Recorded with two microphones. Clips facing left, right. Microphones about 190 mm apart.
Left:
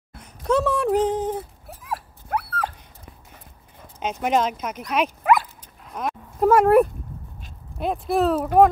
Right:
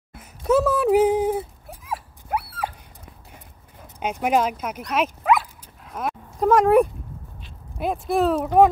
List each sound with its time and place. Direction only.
0.2 s a sound: 5° right (ahead or behind)
1.7 s dog: centre (ahead or behind)
4.0 s speech: 10° right (ahead or behind)
4.8 s dog: centre (ahead or behind)
6.5 s speech: 5° left (ahead or behind)